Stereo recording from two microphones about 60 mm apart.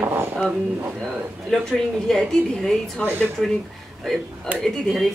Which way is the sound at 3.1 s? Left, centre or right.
Right.